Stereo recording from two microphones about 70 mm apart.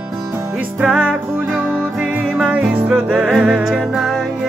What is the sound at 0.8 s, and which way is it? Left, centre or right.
Music, centre.